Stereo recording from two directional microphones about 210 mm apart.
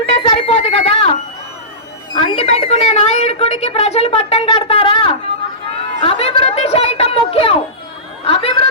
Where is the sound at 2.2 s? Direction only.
25° left (ahead or behind).